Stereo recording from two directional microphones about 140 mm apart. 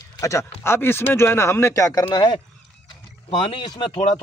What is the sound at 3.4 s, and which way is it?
Speech, 30° left (ahead or behind).